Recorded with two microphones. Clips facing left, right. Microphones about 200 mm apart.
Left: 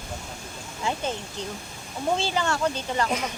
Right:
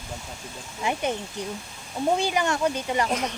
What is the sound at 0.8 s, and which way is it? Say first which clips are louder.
Speech: right 2 dB; 15° right (ahead or behind).